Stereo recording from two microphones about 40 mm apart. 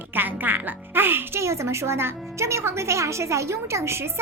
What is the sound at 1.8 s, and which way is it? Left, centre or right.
Speech, right.